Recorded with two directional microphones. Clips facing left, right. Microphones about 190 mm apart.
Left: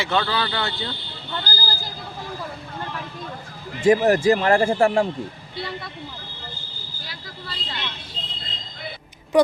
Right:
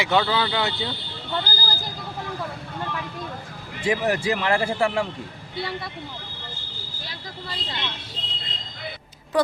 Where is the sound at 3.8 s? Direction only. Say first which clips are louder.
Left 7 dB; 45° left (ahead or behind).